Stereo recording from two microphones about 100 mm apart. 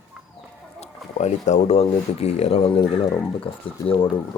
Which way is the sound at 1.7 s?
90° left.